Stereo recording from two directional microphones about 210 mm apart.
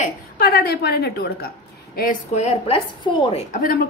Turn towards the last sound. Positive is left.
turn(degrees=40)  # may be behind; listen again after turning